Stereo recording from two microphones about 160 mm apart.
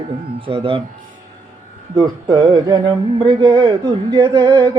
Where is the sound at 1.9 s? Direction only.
25° right (ahead or behind).